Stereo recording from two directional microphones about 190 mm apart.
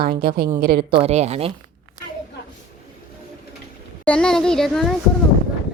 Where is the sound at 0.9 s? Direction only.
35° right (ahead or behind).